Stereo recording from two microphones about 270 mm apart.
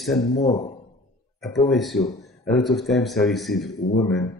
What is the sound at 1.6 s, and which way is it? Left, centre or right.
A man's voice, centre.